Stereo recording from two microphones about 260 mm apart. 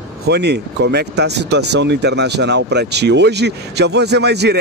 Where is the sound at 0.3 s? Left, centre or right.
Right.